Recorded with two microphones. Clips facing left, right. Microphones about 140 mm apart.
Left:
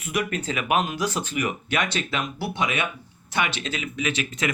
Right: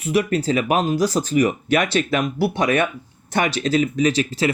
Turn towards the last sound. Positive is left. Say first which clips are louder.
# right 8 dB
turn(degrees=-35)  # may be behind; listen again after turning